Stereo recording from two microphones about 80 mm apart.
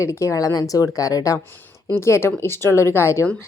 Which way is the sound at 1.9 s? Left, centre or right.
Left.